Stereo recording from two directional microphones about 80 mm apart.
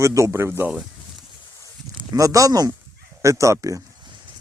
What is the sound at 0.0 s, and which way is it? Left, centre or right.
Speech, right.